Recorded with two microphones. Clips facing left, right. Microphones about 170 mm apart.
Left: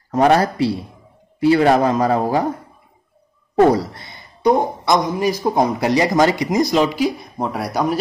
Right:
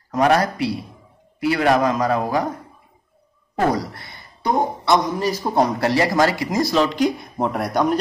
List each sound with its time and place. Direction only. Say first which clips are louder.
0.1 s a man's voice: left 3 dB; 30° left (ahead or behind)
3.6 s a man's voice: left 5 dB; 25° left (ahead or behind); by 8.0 s 5° left (ahead or behind)